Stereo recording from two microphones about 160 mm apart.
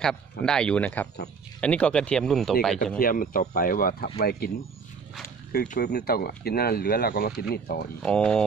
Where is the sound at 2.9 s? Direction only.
60° left (ahead or behind).